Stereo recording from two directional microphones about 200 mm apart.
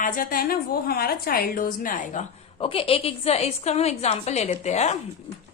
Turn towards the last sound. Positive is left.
turn(degrees=35)  # may be behind; listen again after turning